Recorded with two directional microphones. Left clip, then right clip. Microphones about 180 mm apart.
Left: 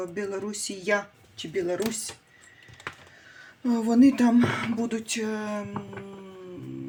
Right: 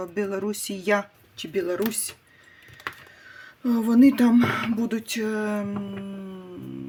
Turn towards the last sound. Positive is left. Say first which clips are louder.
# right 4 dB
turn(degrees=-40)  # may be behind; listen again after turning